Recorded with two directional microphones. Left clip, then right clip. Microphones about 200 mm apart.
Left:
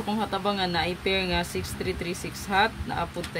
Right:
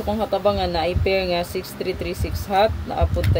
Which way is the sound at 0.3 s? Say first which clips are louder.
Right 8 dB; 20° left (ahead or behind).